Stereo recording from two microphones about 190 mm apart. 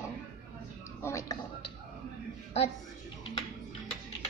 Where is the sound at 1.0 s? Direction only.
15° left (ahead or behind).